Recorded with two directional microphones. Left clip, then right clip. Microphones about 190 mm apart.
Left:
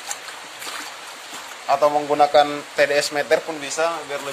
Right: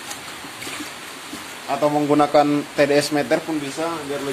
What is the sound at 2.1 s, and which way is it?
Speech, 5° left (ahead or behind).